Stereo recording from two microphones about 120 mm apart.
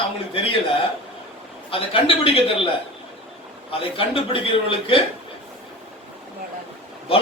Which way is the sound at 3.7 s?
50° left (ahead or behind).